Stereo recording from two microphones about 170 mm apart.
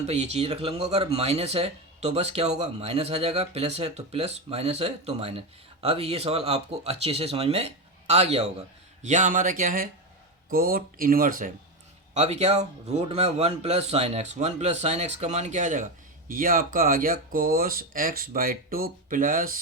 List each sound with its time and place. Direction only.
0.0 s speech: 40° right (ahead or behind)
12.1 s speech: 40° right (ahead or behind)